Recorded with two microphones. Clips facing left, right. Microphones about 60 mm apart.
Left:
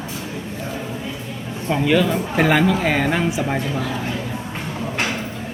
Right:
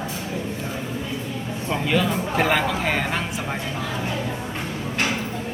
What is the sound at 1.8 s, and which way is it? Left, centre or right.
A man's voice, centre.